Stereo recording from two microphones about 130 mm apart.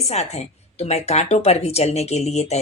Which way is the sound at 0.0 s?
55° left (ahead or behind).